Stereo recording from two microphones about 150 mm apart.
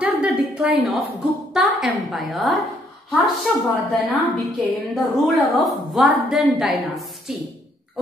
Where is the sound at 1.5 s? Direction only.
Centre (ahead or behind).